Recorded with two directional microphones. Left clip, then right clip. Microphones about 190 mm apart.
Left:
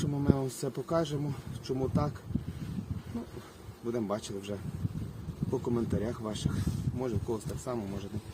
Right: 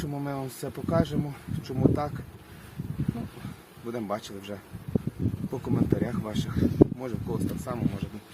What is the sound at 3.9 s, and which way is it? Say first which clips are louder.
Speech: right 1 dB; 10° left (ahead or behind).